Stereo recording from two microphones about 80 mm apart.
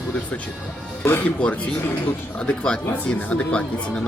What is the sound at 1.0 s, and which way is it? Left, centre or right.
Speech, left.